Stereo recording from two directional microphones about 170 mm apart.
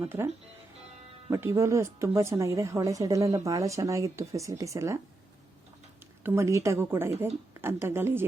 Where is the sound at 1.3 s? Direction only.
15° right (ahead or behind).